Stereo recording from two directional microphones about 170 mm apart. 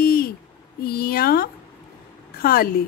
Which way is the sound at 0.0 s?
60° left (ahead or behind).